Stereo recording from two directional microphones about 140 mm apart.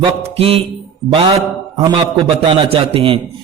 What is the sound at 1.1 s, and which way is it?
Speech, 40° right (ahead or behind).